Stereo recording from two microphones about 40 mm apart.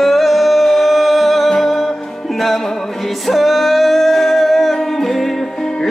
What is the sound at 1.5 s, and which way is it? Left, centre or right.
Music, centre.